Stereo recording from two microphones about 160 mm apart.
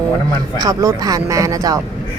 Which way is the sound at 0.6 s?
20° right (ahead or behind).